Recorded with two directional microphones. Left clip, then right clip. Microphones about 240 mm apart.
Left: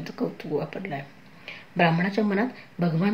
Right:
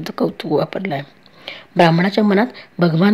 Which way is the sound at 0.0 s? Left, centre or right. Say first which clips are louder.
Right 10 dB; right.